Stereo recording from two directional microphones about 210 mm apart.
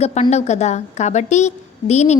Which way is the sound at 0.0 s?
30° left (ahead or behind).